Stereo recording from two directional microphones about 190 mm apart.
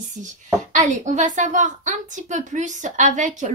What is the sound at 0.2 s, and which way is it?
A woman's voice, 40° right (ahead or behind).